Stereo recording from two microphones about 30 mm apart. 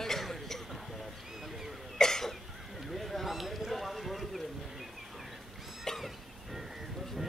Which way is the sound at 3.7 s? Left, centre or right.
Centre.